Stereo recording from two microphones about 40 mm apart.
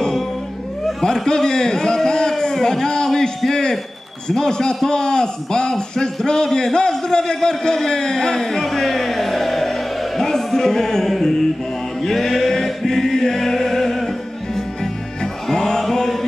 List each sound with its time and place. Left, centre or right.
1.0 s a man's voice: centre
12.0 s chant: centre
15.4 s music: centre
15.8 s mantra: centre